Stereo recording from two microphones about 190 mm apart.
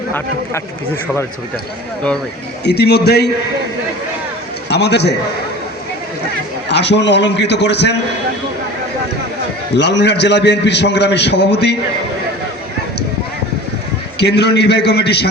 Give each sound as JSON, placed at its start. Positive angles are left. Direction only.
{"t": 2.6, "sound": "a man's voice", "side_deg": 60}
{"t": 4.7, "sound": "a man's voice", "side_deg": 60}
{"t": 6.7, "sound": "a man's voice", "side_deg": 65}
{"t": 9.7, "sound": "a man's voice", "side_deg": 65}
{"t": 14.2, "sound": "a man's voice", "side_deg": 60}